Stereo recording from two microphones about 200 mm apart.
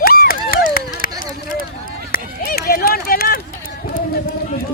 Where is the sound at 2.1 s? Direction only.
50° left (ahead or behind).